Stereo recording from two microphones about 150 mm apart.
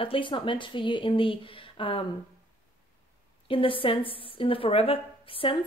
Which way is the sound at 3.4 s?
35° left (ahead or behind).